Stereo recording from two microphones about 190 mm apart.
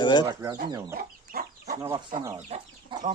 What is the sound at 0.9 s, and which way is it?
Chicken, 50° right (ahead or behind).